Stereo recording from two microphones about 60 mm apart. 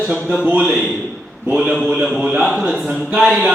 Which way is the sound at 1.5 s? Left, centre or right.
Centre.